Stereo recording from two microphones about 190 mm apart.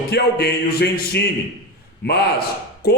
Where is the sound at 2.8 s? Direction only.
55° left (ahead or behind).